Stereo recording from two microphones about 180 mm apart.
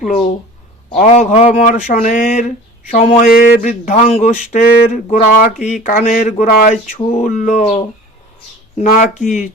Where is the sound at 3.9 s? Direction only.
35° left (ahead or behind).